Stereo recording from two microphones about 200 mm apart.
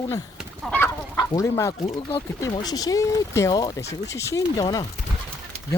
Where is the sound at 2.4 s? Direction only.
20° left (ahead or behind).